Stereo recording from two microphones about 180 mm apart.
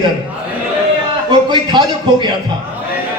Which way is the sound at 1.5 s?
25° right (ahead or behind).